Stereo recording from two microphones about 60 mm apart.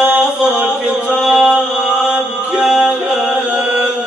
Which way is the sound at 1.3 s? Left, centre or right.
Centre.